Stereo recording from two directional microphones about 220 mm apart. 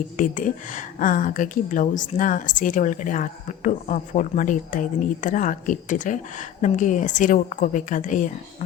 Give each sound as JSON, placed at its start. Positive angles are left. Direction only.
{"t": 0.2, "sound": "a woman's voice", "side_deg": 35}